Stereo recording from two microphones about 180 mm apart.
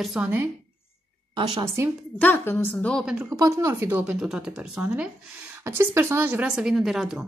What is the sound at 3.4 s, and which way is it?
A woman's voice, 15° right (ahead or behind).